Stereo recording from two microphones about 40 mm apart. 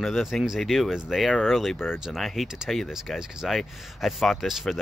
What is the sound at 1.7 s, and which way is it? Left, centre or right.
Speech, left.